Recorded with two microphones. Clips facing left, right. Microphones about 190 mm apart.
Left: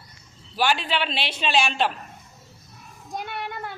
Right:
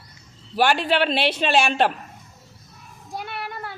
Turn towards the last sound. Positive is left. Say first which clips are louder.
# even
turn(degrees=20)  # may be behind; listen again after turning